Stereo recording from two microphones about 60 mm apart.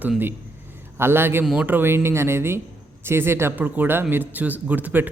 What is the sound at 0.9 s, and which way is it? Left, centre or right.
Speech, right.